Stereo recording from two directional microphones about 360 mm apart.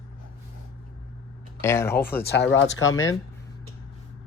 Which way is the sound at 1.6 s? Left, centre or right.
Centre.